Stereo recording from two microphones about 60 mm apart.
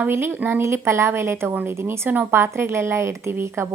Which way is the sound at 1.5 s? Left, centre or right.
Right.